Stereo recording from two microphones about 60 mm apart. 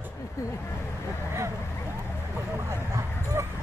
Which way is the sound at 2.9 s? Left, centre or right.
Right.